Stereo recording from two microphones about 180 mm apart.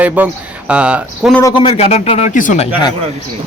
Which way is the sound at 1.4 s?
20° left (ahead or behind).